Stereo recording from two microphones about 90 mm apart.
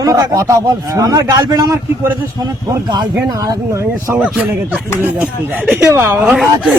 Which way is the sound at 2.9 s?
50° right (ahead or behind).